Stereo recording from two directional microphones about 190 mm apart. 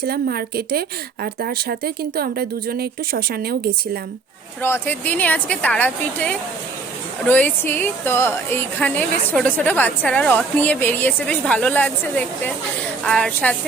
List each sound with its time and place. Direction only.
0.0 s a woman's voice: 55° right (ahead or behind)
4.6 s a woman's voice: 10° left (ahead or behind)